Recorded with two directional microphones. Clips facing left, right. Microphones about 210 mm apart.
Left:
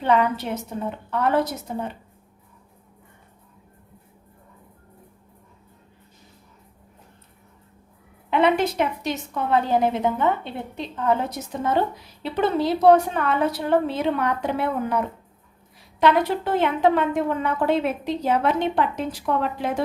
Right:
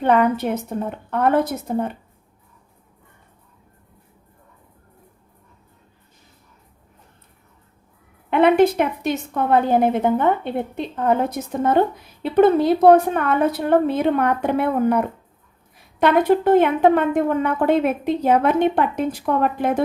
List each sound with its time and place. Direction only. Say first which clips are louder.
0.0 s a woman's voice: right 4 dB; 55° right (ahead or behind)
8.3 s a woman's voice: right 5 dB; 55° right (ahead or behind)